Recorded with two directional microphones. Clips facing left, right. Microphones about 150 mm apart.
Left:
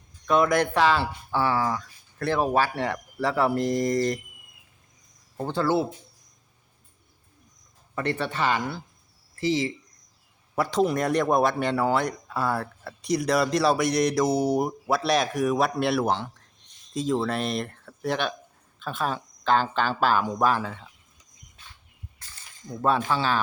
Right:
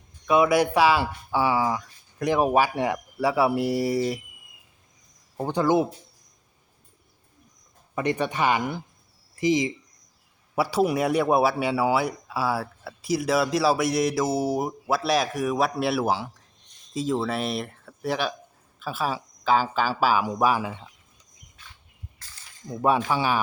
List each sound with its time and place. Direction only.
0.3 s speech: 10° right (ahead or behind)
5.4 s speech: 15° right (ahead or behind)
7.9 s speech: 15° right (ahead or behind)
22.7 s speech: 15° right (ahead or behind)